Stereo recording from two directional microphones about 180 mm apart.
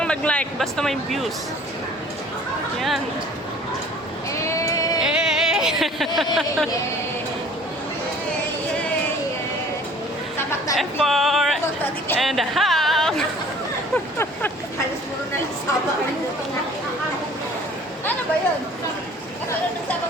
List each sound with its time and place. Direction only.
0.0 s speech: 5° left (ahead or behind)
4.3 s sheep: 15° left (ahead or behind)
4.9 s a sound: 5° right (ahead or behind)
10.8 s speech: centre (ahead or behind)
13.9 s vehicle: 10° left (ahead or behind)